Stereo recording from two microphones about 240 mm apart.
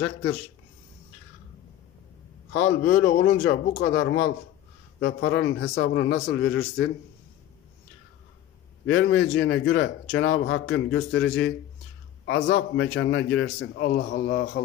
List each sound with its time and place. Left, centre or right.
0.0 s speech: left
2.5 s a man's voice: left
8.8 s a man's voice: left